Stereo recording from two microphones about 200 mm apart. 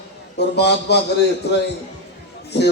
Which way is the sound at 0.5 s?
55° left (ahead or behind).